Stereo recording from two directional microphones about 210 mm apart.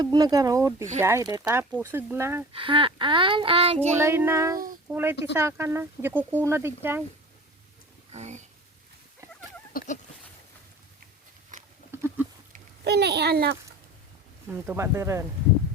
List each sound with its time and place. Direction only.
0.0 s speech: 20° right (ahead or behind)
2.5 s child singing: 25° right (ahead or behind)
3.9 s speech: 10° right (ahead or behind)
8.1 s speech: 35° right (ahead or behind)
9.7 s a sound: 35° left (ahead or behind)
11.9 s a sound: 10° right (ahead or behind)
12.5 s a child's voice: 50° right (ahead or behind)
14.4 s speech: 10° right (ahead or behind)